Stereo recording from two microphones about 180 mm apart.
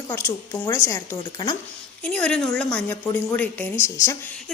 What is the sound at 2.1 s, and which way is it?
A woman's voice, 5° left (ahead or behind).